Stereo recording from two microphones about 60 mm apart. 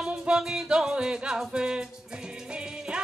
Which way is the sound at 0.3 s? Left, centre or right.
Centre.